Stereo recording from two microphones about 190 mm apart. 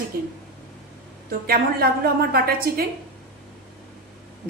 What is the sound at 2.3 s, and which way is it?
Speech, 55° right (ahead or behind).